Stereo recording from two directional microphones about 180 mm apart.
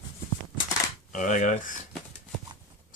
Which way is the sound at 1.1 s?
45° left (ahead or behind).